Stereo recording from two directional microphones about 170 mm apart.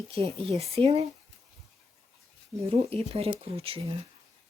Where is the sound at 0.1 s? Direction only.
35° right (ahead or behind).